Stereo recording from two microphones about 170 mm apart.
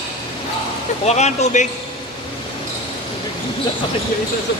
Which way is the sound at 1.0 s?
40° left (ahead or behind).